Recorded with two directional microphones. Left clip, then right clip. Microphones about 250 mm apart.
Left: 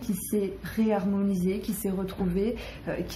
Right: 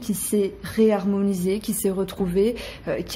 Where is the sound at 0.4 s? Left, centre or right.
Right.